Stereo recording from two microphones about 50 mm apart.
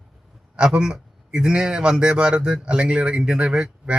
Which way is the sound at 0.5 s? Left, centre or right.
Centre.